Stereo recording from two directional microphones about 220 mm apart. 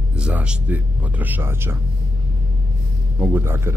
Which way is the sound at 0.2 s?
5° right (ahead or behind).